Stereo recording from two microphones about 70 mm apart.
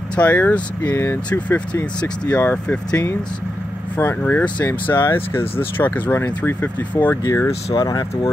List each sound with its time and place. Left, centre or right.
0.1 s speech: left
3.9 s speech: left
7.2 s speech: left
7.7 s speech: left